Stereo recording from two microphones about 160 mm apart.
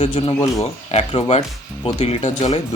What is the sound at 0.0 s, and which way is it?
Speech, 30° left (ahead or behind).